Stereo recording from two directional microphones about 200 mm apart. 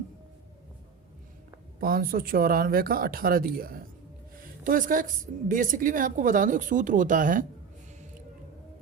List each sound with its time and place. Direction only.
1.8 s a woman's voice: 45° right (ahead or behind)